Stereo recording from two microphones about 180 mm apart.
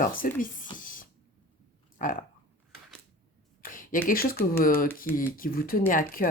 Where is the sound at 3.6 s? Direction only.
50° left (ahead or behind).